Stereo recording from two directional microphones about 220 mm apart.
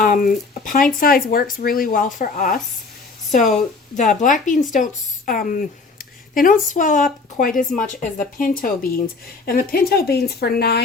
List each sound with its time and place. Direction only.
0.0 s speech: 40° left (ahead or behind)
3.9 s speech: 35° left (ahead or behind)